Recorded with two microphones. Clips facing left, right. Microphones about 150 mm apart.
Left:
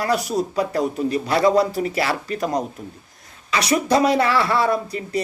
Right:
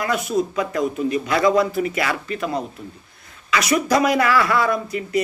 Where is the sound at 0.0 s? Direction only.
35° left (ahead or behind).